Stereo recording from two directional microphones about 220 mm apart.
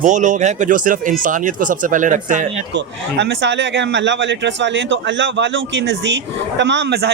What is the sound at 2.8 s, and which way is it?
A man's voice, 55° right (ahead or behind).